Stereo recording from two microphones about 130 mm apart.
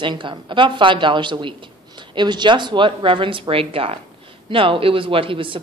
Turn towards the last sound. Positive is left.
turn(degrees=-40)  # may be behind; listen again after turning